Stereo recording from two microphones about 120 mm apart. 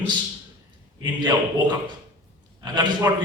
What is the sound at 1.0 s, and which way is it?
A man's voice, 40° right (ahead or behind).